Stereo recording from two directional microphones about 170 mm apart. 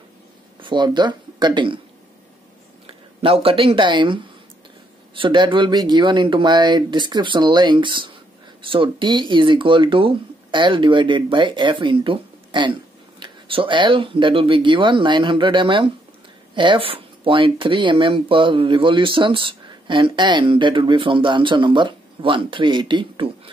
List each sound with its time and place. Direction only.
0.6 s speech: 25° right (ahead or behind)
2.9 s speech: 35° right (ahead or behind)